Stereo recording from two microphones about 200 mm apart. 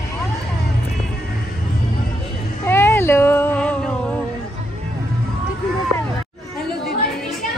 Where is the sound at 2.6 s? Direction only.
10° left (ahead or behind).